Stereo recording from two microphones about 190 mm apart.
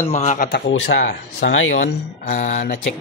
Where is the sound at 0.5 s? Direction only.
80° left.